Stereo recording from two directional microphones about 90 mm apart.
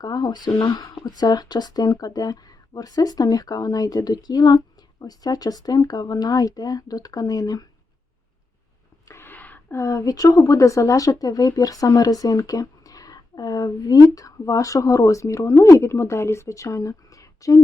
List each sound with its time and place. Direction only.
0.0 s speech: 50° left (ahead or behind)
9.0 s a sound: 25° left (ahead or behind)
9.7 s speech: 35° left (ahead or behind)